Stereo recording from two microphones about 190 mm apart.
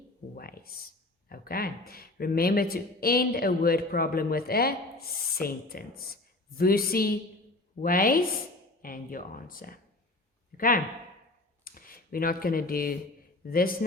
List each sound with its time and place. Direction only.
0.3 s speech: 50° left (ahead or behind)